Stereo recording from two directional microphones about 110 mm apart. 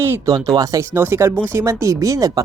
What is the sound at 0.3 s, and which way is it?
Speech, 35° right (ahead or behind).